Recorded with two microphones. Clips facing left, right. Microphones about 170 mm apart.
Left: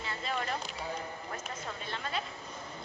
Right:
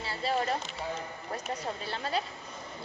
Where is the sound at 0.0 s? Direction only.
30° right (ahead or behind).